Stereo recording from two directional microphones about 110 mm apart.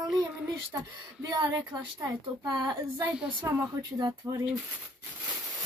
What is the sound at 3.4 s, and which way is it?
Speech, 25° right (ahead or behind).